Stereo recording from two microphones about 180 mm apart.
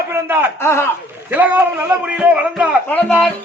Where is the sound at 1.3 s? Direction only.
10° right (ahead or behind).